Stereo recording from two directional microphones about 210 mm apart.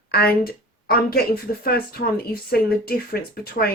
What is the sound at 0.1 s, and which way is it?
A woman's voice, 45° left (ahead or behind).